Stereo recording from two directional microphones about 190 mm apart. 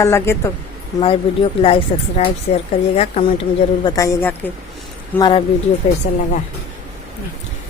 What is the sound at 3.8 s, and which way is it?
Speech, 20° left (ahead or behind).